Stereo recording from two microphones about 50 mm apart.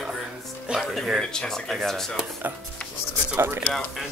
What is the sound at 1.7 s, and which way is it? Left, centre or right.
Speech, centre.